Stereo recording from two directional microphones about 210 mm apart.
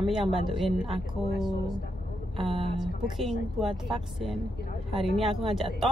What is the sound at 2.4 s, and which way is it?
Speech, 25° right (ahead or behind).